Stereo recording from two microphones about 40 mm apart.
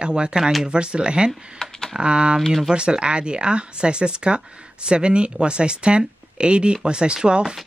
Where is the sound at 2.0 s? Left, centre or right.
Right.